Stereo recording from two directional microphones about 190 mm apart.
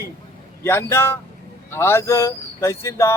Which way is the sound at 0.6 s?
15° left (ahead or behind).